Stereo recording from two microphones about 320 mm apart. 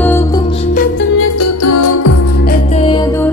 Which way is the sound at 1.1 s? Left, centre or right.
Left.